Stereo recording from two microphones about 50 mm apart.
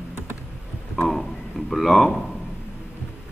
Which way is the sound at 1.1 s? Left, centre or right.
Centre.